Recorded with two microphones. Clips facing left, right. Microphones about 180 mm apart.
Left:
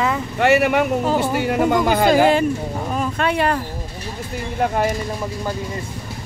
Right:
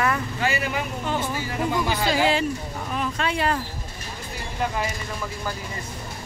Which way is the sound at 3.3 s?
60° left (ahead or behind).